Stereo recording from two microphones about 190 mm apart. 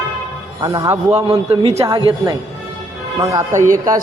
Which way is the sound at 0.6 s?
20° right (ahead or behind).